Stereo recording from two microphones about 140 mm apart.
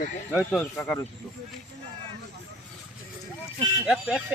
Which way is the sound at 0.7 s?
10° left (ahead or behind).